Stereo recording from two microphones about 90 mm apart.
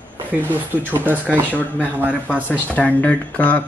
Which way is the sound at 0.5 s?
20° right (ahead or behind).